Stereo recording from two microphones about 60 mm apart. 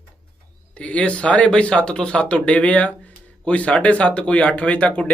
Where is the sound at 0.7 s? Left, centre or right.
Left.